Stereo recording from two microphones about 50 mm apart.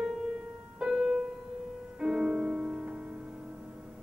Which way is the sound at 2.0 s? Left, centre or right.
Centre.